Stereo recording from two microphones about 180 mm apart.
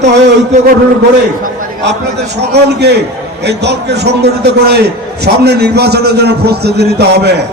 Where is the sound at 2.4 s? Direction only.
65° right (ahead or behind).